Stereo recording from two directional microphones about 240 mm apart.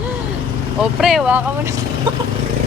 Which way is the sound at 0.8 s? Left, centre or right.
Centre.